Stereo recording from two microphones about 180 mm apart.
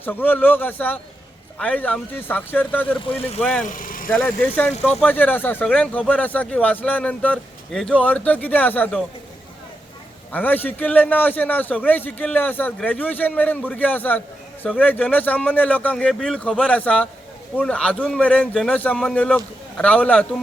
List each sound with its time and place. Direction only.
0.0 s speech: 10° left (ahead or behind)
3.7 s vehicle: 50° left (ahead or behind)
4.1 s speech: 10° left (ahead or behind)
10.3 s speech: 10° left (ahead or behind)